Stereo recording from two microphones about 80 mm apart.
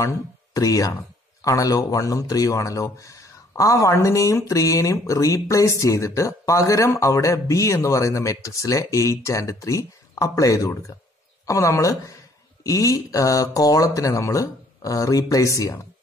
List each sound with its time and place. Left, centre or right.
0.6 s speech: left